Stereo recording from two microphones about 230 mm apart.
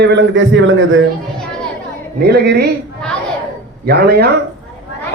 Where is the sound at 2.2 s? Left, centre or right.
Right.